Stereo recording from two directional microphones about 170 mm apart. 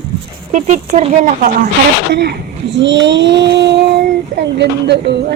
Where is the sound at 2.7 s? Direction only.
90° right.